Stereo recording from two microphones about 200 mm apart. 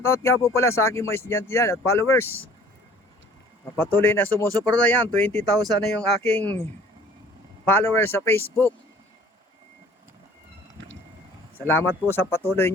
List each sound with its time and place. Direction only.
0.0 s speech: 15° left (ahead or behind)
3.8 s speech: 10° left (ahead or behind)
7.7 s speech: 10° left (ahead or behind)
11.5 s speech: 10° left (ahead or behind)